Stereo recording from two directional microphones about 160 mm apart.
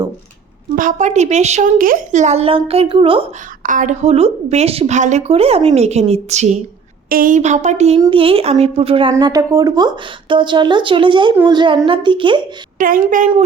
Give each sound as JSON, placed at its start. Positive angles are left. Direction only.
{"t": 0.8, "sound": "a woman's voice", "side_deg": -50}
{"t": 3.6, "sound": "a woman's voice", "side_deg": -55}
{"t": 7.1, "sound": "a woman's voice", "side_deg": -60}
{"t": 9.1, "sound": "a woman's voice", "side_deg": -20}
{"t": 12.8, "sound": "a woman's voice", "side_deg": -55}